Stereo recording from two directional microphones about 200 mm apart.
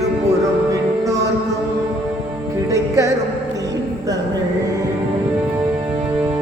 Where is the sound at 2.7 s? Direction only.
15° right (ahead or behind).